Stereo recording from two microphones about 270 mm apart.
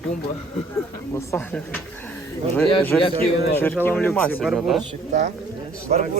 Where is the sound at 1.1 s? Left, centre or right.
Centre.